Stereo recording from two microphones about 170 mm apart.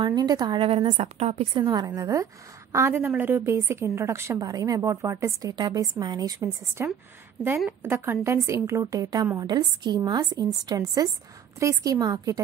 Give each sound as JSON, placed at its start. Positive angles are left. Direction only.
{"t": 0.0, "sound": "a woman's voice", "side_deg": -25}